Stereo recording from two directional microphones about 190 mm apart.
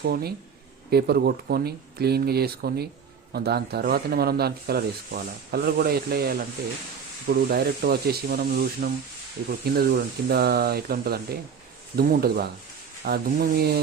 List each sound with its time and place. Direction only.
0.0 s speech: 55° right (ahead or behind)